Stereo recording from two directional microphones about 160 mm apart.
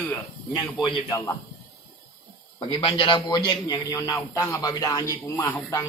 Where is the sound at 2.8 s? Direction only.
30° left (ahead or behind).